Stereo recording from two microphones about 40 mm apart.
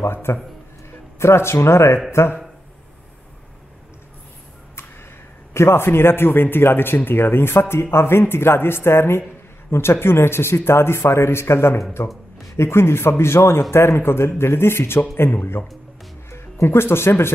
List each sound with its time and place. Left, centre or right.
0.0 s speech: left
1.4 s speech: left
5.5 s a man's voice: left
16.3 s speech: left